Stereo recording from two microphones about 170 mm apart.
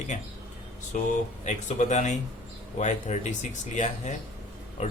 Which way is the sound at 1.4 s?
45° left (ahead or behind).